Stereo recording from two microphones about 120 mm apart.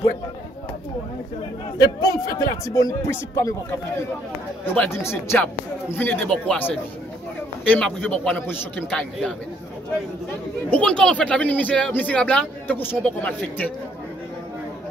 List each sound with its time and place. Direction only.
1.8 s speech: 30° left (ahead or behind)
4.7 s speech: 20° left (ahead or behind)
10.7 s speech: 5° left (ahead or behind)